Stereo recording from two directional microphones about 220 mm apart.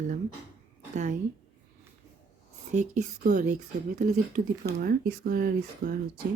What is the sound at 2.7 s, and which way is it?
Speech, 35° right (ahead or behind).